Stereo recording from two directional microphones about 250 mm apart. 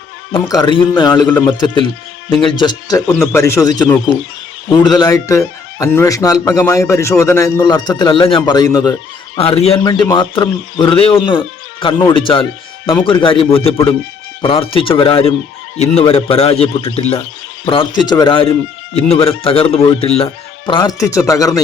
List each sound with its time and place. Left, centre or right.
0.3 s speech: centre